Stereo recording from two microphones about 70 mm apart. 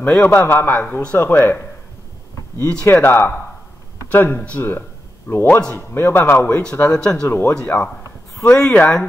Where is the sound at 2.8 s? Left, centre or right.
Left.